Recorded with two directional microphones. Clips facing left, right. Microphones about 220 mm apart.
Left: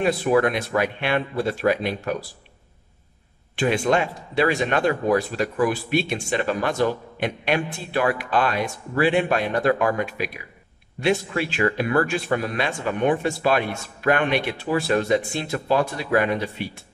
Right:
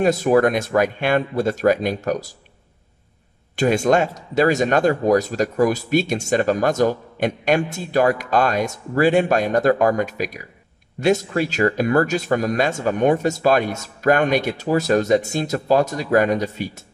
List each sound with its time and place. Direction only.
0.0 s speech: 45° right (ahead or behind)
3.5 s speech: 40° right (ahead or behind)